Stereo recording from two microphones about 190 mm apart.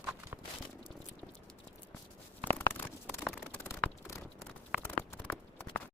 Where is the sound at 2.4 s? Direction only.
10° left (ahead or behind).